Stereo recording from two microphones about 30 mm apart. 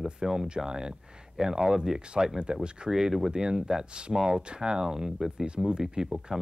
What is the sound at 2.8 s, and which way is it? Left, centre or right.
Speech, right.